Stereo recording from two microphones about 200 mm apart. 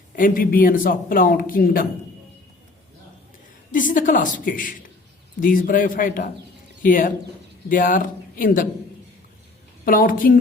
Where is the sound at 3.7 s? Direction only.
40° left (ahead or behind).